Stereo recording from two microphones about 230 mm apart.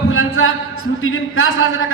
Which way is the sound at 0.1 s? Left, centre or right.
Left.